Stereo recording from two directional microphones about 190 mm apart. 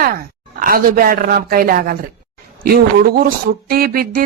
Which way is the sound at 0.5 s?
50° right (ahead or behind).